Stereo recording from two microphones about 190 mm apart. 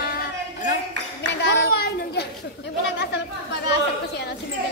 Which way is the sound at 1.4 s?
65° left (ahead or behind).